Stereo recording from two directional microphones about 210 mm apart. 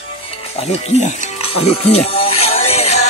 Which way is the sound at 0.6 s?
30° left (ahead or behind).